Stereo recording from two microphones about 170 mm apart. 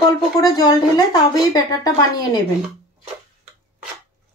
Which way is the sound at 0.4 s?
20° left (ahead or behind).